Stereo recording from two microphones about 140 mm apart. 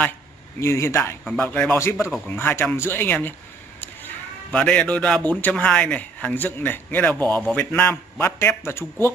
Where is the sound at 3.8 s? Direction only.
10° left (ahead or behind).